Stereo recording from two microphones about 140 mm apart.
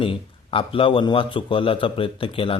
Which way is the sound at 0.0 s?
40° left (ahead or behind).